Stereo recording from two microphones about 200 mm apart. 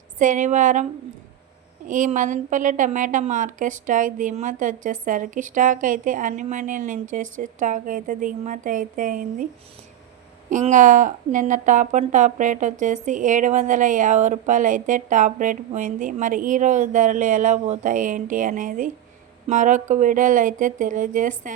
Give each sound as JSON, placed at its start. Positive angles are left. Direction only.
{"t": 0.2, "sound": "a woman's voice", "side_deg": -40}
{"t": 1.9, "sound": "a woman's voice", "side_deg": -40}
{"t": 10.5, "sound": "a woman's voice", "side_deg": -40}